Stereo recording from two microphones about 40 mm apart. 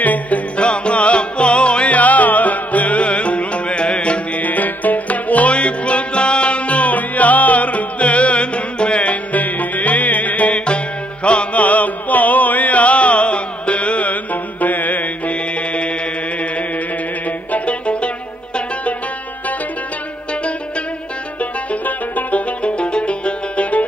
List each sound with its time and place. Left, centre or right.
0.0 s music: left
0.6 s music: left
4.4 s music: left
11.2 s chant: left
17.5 s music: left
21.4 s music: left
22.6 s music: left